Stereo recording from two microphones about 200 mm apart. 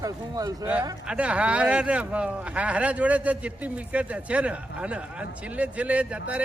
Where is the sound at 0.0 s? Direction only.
15° right (ahead or behind).